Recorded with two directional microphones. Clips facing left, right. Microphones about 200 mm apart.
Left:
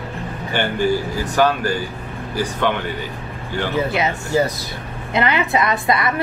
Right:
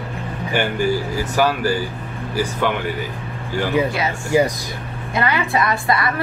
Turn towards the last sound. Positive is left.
turn(degrees=20)  # may be behind; listen again after turning